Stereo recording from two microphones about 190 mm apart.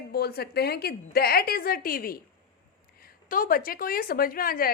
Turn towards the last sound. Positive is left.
turn(degrees=50)  # may be behind; listen again after turning